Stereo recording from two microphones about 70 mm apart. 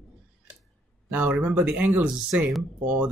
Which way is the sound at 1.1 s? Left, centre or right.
Centre.